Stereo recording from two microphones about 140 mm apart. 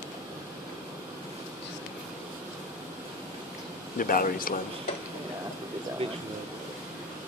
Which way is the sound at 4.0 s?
90° left.